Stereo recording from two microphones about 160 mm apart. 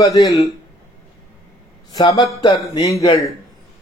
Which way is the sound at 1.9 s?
25° left (ahead or behind).